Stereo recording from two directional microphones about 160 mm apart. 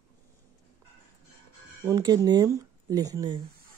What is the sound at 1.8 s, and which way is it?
Speech, 25° right (ahead or behind).